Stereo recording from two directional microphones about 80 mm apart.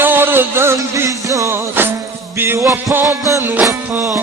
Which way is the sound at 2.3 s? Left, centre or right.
Right.